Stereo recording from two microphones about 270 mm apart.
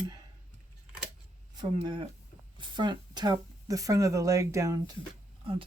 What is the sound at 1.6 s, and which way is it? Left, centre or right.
Speech, centre.